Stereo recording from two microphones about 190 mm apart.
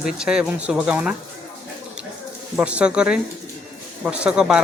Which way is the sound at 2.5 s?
5° right (ahead or behind).